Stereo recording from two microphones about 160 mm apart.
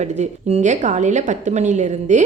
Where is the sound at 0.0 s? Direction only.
45° right (ahead or behind).